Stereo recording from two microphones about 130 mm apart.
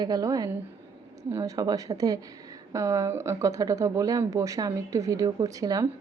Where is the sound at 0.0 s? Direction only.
30° right (ahead or behind).